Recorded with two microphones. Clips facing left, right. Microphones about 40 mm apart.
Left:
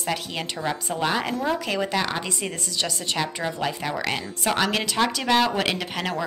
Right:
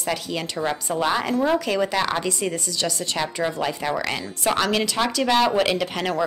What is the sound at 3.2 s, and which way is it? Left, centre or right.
A woman's voice, centre.